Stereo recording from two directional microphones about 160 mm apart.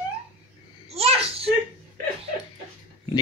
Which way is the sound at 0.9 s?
40° right (ahead or behind).